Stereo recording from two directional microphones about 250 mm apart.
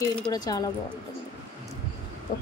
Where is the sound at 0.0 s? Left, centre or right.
Centre.